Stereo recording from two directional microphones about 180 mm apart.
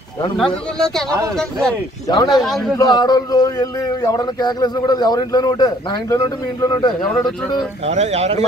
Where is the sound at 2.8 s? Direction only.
20° left (ahead or behind).